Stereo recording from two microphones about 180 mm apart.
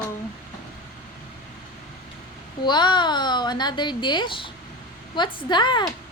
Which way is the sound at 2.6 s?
25° left (ahead or behind).